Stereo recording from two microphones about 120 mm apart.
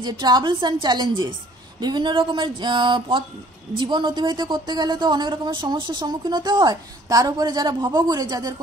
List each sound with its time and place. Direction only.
0.0 s a woman's voice: 35° right (ahead or behind)